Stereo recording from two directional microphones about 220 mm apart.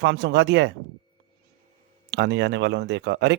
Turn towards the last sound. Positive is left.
turn(degrees=-55)  # may be behind; listen again after turning